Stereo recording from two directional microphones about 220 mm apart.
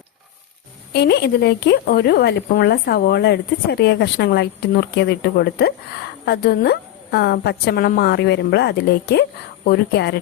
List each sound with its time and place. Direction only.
0.9 s speech: 50° left (ahead or behind)